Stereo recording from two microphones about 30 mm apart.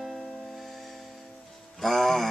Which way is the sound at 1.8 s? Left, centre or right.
Centre.